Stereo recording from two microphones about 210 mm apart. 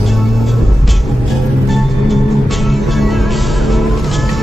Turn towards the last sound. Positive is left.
turn(degrees=0)  # may be behind; listen again after turning